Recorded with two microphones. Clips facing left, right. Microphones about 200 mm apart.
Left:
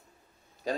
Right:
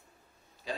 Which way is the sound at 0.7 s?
45° left (ahead or behind).